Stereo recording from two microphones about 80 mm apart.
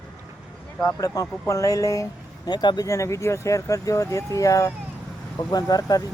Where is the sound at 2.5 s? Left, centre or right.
Left.